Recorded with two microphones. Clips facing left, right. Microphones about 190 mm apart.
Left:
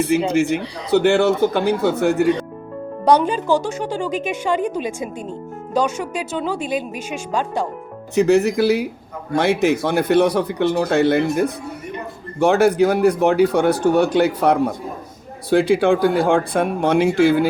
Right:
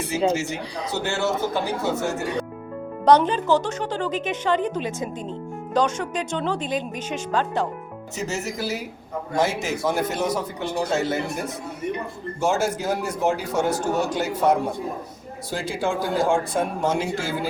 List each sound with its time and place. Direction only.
0.1 s a man's voice: 65° left (ahead or behind)
3.0 s a woman's voice: 10° left (ahead or behind)
8.1 s a man's voice: 60° left (ahead or behind)